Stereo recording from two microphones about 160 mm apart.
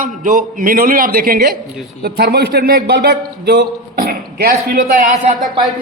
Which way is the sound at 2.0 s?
75° right (ahead or behind).